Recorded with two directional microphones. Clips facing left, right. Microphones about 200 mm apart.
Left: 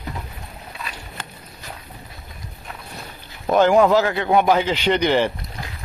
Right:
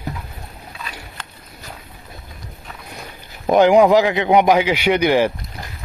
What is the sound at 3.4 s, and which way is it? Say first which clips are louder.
A man's voice: right 3 dB; 15° right (ahead or behind).